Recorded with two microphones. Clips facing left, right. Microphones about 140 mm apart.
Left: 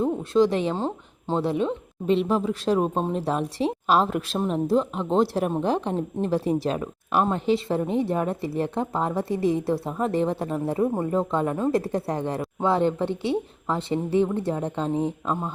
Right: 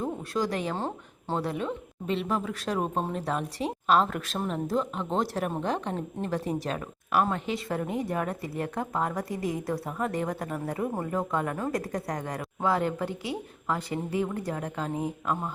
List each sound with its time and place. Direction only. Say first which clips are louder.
0.0 s a woman's voice: left 9 dB; 25° left (ahead or behind)
1.4 s speech: left 7 dB; 25° left (ahead or behind)